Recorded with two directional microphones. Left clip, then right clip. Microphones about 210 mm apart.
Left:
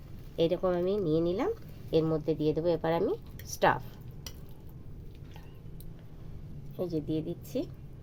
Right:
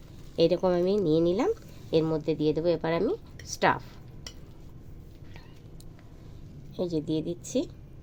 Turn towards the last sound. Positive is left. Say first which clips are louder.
# right 4 dB
turn(degrees=0)  # may be behind; listen again after turning